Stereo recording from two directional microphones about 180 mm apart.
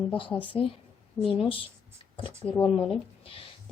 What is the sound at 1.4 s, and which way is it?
Speech, 30° left (ahead or behind).